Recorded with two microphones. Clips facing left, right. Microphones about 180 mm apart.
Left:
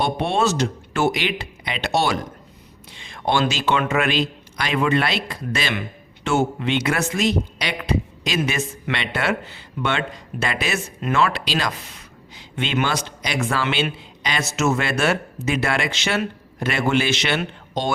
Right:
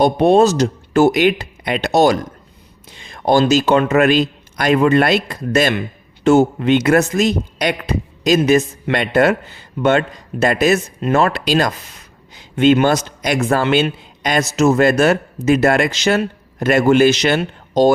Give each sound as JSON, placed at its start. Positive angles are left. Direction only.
{"t": 0.0, "sound": "a man's voice", "side_deg": -40}
{"t": 14.2, "sound": "a sound", "side_deg": -50}
{"t": 14.5, "sound": "a man's voice", "side_deg": -35}